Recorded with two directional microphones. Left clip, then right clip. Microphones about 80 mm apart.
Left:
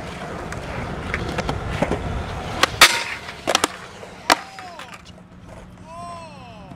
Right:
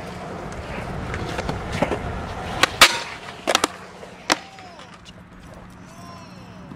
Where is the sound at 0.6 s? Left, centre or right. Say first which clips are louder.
Left 1 dB; centre.